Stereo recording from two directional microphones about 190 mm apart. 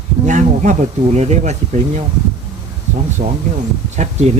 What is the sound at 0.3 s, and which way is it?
Speech, 40° right (ahead or behind).